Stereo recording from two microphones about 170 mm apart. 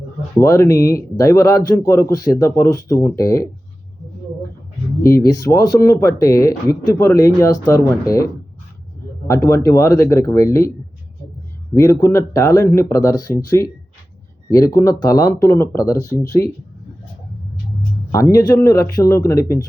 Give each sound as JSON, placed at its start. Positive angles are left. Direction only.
{"t": 0.3, "sound": "speech", "side_deg": 15}
{"t": 5.0, "sound": "speech", "side_deg": 20}
{"t": 9.5, "sound": "speech", "side_deg": 20}
{"t": 11.7, "sound": "speech", "side_deg": 20}
{"t": 18.3, "sound": "speech", "side_deg": 20}